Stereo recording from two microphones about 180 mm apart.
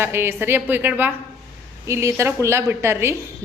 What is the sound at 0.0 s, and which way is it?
A woman's voice, 15° right (ahead or behind).